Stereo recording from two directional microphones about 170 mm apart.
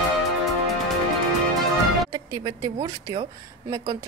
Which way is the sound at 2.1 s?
25° right (ahead or behind).